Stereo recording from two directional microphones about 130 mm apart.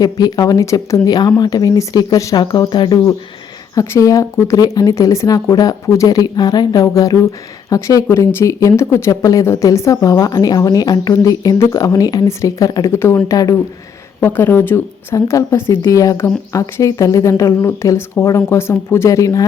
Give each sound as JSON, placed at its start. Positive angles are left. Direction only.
{"t": 0.0, "sound": "speech", "side_deg": 30}